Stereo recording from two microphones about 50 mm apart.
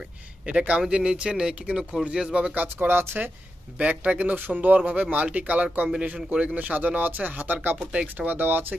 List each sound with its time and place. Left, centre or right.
0.5 s speech: right
2.6 s speech: right
4.0 s speech: right
7.8 s speech: centre
8.3 s speech: right